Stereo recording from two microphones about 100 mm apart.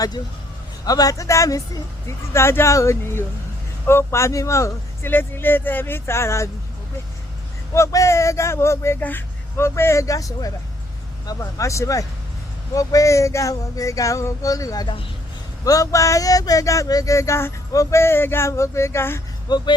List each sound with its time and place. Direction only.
0.9 s speech: 35° left (ahead or behind)
7.7 s speech: 30° left (ahead or behind)
19.5 s speech: 45° left (ahead or behind)